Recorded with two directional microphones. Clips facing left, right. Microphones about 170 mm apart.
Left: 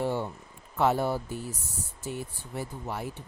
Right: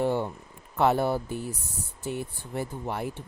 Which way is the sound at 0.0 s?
55° right (ahead or behind).